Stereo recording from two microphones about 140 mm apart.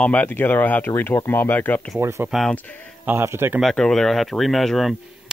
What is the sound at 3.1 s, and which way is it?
Speech, 15° right (ahead or behind).